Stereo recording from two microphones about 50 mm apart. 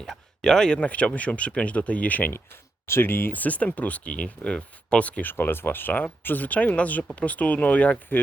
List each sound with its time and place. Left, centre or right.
0.0 s speech: centre
0.9 s speech: left
2.3 s speech: left
3.3 s speech: left
5.2 s speech: left